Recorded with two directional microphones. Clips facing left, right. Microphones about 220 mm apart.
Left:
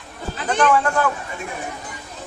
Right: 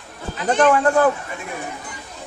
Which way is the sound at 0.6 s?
35° right (ahead or behind).